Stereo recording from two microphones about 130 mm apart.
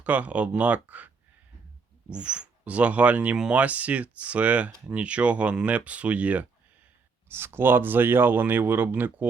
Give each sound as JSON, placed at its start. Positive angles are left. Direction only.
{"t": 0.0, "sound": "speech", "side_deg": -10}